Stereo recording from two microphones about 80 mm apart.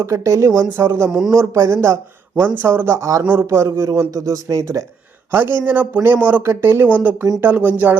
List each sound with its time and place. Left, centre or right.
0.0 s speech: right
3.2 s speech: right
3.6 s a man's voice: right
5.3 s speech: right